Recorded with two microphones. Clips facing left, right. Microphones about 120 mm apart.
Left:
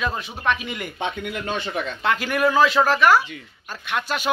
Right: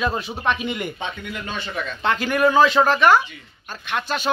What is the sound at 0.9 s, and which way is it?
Speech, 55° left (ahead or behind).